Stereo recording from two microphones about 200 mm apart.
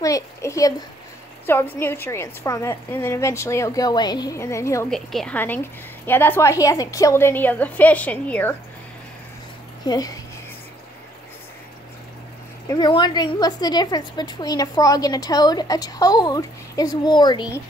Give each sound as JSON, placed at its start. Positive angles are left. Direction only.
{"t": 0.0, "sound": "a woman's voice", "side_deg": 15}
{"t": 4.9, "sound": "a woman's voice", "side_deg": 5}
{"t": 9.8, "sound": "speech", "side_deg": 20}
{"t": 12.6, "sound": "a woman's voice", "side_deg": 20}